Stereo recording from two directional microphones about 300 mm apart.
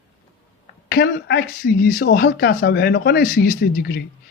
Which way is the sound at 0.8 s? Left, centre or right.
Left.